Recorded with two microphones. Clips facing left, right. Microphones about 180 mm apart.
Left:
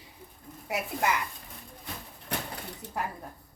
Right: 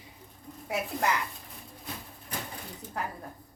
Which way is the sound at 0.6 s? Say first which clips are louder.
Even; centre (ahead or behind).